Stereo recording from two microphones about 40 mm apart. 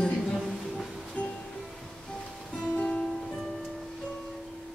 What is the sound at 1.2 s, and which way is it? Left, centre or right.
Music, left.